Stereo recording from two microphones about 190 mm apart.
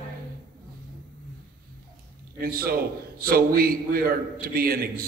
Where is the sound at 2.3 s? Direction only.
50° right (ahead or behind).